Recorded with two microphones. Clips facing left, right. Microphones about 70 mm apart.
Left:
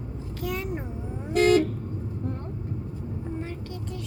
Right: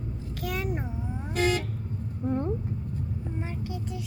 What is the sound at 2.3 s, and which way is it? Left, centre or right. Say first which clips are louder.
Vehicle: right 12 dB; centre.